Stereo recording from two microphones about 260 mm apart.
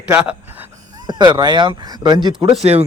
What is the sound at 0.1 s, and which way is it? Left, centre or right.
Speech, centre.